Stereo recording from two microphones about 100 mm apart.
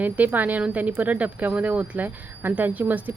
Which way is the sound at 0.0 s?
15° right (ahead or behind).